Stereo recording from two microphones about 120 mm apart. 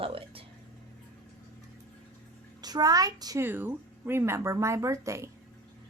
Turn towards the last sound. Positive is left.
turn(degrees=-25)  # may be behind; listen again after turning